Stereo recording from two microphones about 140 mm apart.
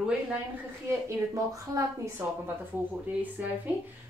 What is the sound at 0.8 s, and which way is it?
A woman's voice, 20° right (ahead or behind).